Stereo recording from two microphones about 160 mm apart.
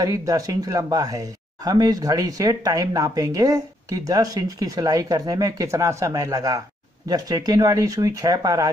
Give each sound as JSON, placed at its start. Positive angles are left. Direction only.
{"t": 0.0, "sound": "speech", "side_deg": -20}